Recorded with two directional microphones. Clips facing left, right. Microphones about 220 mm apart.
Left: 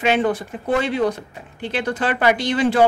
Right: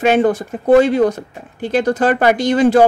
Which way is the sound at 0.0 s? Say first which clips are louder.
Right 5 dB; 45° right (ahead or behind).